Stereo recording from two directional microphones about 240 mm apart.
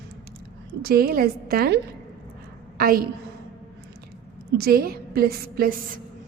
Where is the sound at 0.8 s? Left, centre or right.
Right.